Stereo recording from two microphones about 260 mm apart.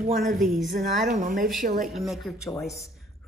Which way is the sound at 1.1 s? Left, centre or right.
Right.